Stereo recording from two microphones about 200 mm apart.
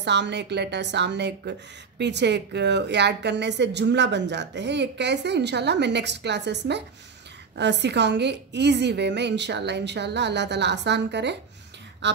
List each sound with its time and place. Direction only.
0.0 s speech: 60° right (ahead or behind)